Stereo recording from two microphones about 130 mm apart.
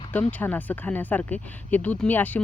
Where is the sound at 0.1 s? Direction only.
10° left (ahead or behind).